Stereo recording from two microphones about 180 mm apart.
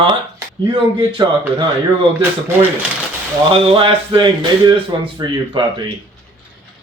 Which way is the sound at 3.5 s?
30° right (ahead or behind).